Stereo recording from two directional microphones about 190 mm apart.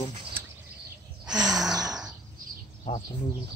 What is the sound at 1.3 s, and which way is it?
Gasp, 5° right (ahead or behind).